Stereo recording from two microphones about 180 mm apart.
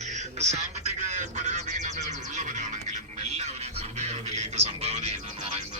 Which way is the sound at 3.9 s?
40° right (ahead or behind).